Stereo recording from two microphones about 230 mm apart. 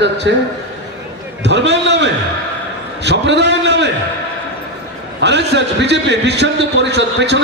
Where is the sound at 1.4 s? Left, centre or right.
Right.